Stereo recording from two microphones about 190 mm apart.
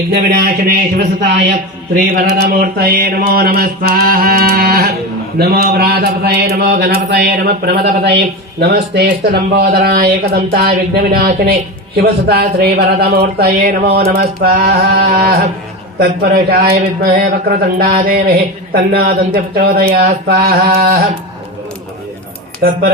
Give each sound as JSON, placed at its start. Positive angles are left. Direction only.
{"t": 0.1, "sound": "speech", "side_deg": -50}
{"t": 2.1, "sound": "speech", "side_deg": -50}
{"t": 22.6, "sound": "speech", "side_deg": -55}